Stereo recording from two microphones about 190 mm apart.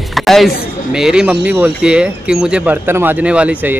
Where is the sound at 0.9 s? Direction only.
5° right (ahead or behind).